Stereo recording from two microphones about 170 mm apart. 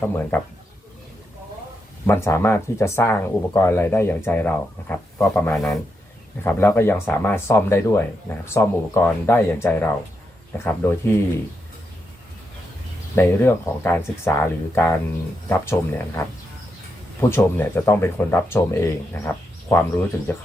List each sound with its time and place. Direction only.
0.3 s speech: 10° left (ahead or behind)
2.0 s speech: 15° left (ahead or behind)
13.1 s speech: 15° left (ahead or behind)